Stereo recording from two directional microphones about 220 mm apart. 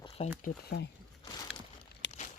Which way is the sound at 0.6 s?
45° left (ahead or behind).